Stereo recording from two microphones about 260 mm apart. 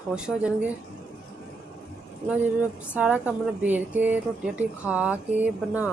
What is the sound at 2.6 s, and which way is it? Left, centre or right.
A woman's voice, centre.